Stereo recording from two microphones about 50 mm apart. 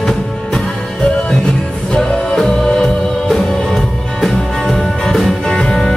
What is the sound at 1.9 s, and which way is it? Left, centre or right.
Music, centre.